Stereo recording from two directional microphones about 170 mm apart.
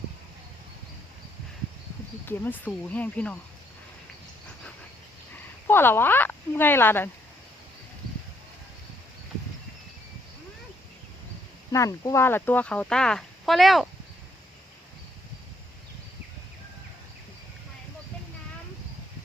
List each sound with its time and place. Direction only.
2.2 s speech: 10° left (ahead or behind)
5.6 s speech: 10° left (ahead or behind)
11.7 s speech: 20° left (ahead or behind); by 13.9 s centre (ahead or behind)